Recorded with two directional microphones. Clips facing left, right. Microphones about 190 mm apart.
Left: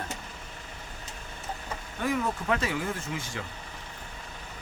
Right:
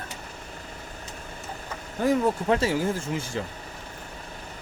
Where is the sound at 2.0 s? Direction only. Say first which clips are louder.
Right 7 dB; 30° right (ahead or behind).